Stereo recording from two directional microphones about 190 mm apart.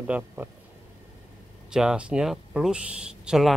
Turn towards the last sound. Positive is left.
turn(degrees=-5)  # may be behind; listen again after turning